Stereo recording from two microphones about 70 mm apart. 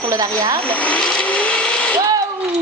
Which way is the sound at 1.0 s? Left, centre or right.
Centre.